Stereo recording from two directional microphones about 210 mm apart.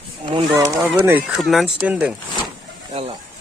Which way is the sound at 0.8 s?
10° right (ahead or behind).